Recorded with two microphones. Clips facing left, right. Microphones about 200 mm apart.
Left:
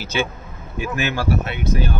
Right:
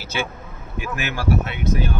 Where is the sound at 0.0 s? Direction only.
20° left (ahead or behind).